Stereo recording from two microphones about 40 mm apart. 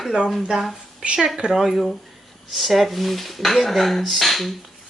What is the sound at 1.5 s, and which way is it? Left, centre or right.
Speech, centre.